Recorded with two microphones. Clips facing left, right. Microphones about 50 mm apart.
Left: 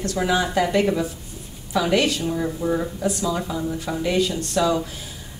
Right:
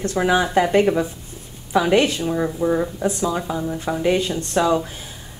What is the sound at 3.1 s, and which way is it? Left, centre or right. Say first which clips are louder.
Speech: right 2 dB; right.